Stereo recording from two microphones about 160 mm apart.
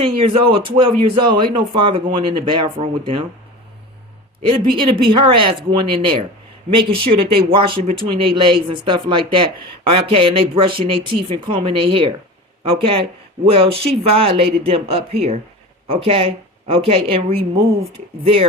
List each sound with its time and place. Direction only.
0.0 s speech: 35° right (ahead or behind)
4.4 s speech: 30° right (ahead or behind)